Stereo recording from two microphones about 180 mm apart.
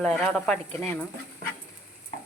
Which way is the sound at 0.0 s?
5° left (ahead or behind).